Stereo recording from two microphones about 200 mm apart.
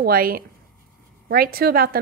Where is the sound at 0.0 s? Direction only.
45° right (ahead or behind).